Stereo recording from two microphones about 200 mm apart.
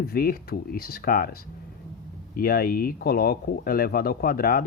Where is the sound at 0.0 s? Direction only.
50° left (ahead or behind).